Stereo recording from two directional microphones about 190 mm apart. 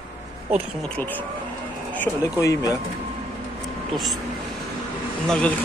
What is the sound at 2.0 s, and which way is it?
Speech, 15° left (ahead or behind).